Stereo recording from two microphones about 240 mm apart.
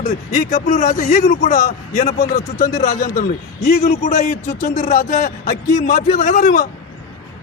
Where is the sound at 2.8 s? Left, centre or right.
Left.